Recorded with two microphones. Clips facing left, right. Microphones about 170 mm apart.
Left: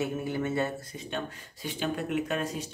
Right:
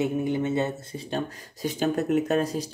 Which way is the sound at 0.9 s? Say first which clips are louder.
Right 5 dB; 35° right (ahead or behind).